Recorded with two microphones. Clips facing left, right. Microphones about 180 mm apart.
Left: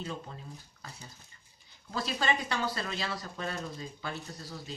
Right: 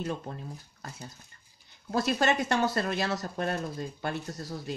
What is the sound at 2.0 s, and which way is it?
Speech, 50° right (ahead or behind).